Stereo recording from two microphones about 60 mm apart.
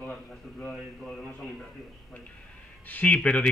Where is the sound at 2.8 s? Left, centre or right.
Left.